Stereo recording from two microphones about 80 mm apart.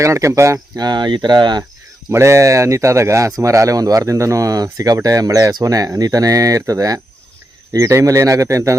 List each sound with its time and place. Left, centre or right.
0.0 s speech: right
0.8 s speech: right
2.0 s speech: right